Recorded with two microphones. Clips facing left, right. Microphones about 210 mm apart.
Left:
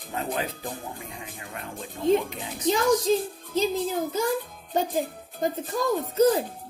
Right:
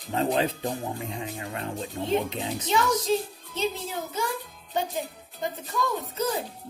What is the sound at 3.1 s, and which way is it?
Music, 35° left (ahead or behind).